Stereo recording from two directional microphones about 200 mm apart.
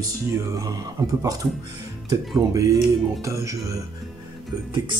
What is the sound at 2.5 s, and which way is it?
Speech, 15° right (ahead or behind).